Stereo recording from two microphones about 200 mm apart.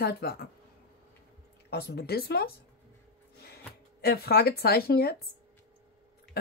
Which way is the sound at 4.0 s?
50° left (ahead or behind).